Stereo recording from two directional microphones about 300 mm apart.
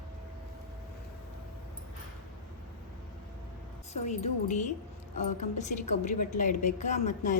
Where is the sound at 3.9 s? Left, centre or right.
Left.